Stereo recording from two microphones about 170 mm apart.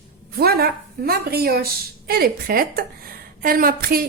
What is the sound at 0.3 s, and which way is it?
A woman's voice, 65° right (ahead or behind).